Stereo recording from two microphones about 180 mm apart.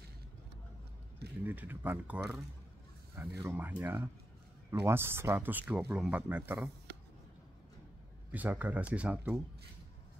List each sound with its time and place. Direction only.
1.4 s speech: 10° right (ahead or behind)
8.3 s speech: 10° right (ahead or behind)